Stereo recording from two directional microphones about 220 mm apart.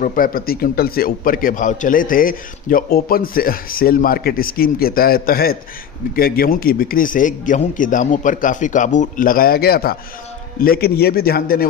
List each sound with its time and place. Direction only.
0.0 s a man's voice: 40° left (ahead or behind)